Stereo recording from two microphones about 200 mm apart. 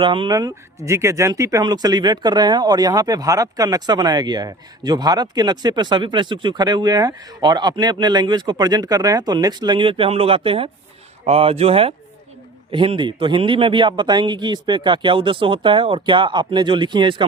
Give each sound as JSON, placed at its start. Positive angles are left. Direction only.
{"t": 0.0, "sound": "speech", "side_deg": -25}